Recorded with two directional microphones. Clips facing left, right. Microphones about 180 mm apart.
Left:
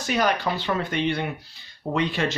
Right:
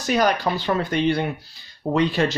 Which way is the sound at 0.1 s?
40° right (ahead or behind).